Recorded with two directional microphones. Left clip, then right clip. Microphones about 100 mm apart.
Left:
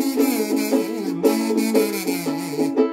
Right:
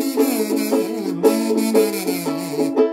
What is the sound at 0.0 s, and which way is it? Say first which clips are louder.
Music: right 2 dB; 15° right (ahead or behind).